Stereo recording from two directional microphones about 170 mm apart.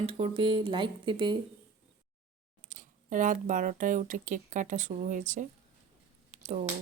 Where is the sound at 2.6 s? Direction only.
50° right (ahead or behind).